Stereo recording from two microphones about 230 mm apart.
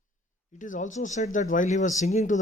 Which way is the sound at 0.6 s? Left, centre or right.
Left.